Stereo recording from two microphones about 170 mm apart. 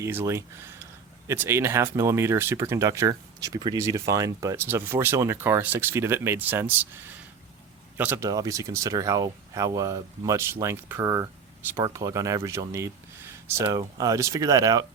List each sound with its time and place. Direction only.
0.0 s speech: 15° right (ahead or behind)